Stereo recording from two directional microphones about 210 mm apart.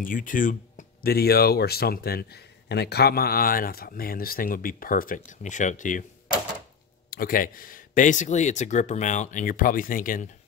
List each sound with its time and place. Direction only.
0.0 s speech: 40° left (ahead or behind)
7.1 s speech: 45° left (ahead or behind)